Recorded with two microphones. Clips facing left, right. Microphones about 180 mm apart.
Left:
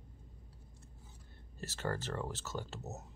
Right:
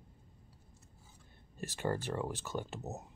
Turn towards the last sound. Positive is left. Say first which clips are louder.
# right 3 dB
turn(degrees=-15)  # may be behind; listen again after turning